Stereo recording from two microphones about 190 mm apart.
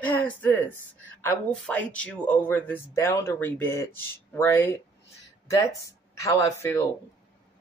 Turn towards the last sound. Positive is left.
turn(degrees=15)  # may be behind; listen again after turning